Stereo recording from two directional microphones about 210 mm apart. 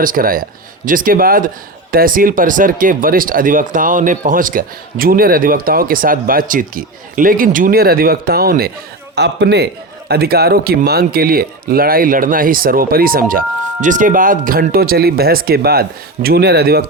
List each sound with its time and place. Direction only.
0.0 s speech: 40° right (ahead or behind)